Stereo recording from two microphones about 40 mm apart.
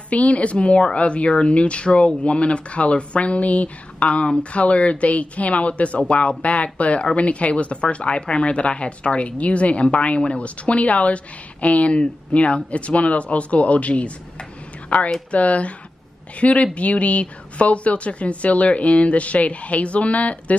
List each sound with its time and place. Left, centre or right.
0.1 s a woman's voice: left